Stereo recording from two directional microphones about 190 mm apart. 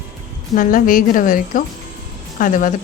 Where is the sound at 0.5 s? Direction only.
45° left (ahead or behind).